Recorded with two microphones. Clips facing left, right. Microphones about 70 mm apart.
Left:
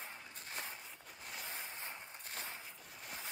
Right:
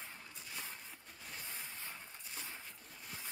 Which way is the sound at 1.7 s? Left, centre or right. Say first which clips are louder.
Left 2 dB; left.